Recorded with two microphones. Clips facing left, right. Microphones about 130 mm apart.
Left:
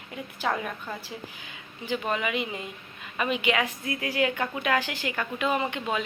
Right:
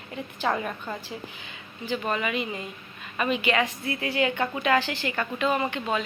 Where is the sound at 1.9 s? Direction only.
10° left (ahead or behind).